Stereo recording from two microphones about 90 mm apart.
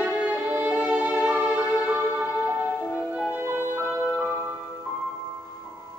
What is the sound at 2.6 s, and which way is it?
Music, 25° left (ahead or behind).